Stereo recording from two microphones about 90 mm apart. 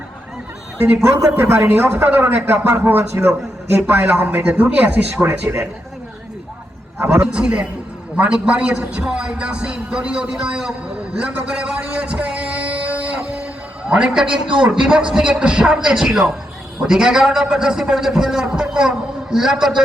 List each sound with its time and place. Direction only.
1.4 s a man's voice: 25° right (ahead or behind)
5.3 s speech: 30° right (ahead or behind)
7.0 s a man's voice: 30° right (ahead or behind)
7.3 s a man's voice: 10° right (ahead or behind)
11.2 s a sound: 10° right (ahead or behind)
13.8 s a man's voice: 10° right (ahead or behind)